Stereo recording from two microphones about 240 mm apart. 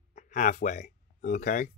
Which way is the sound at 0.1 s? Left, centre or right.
Left.